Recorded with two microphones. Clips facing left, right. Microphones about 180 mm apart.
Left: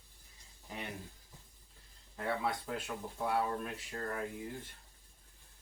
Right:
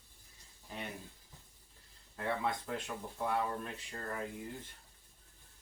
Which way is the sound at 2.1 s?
5° left (ahead or behind).